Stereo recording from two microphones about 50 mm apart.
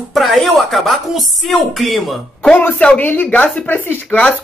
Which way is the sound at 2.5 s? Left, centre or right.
Left.